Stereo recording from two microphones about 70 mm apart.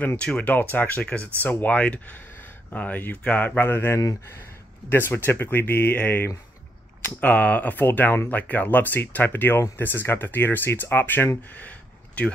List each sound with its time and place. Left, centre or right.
0.2 s speech: centre